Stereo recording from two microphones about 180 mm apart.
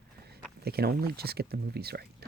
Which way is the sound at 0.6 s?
60° right (ahead or behind).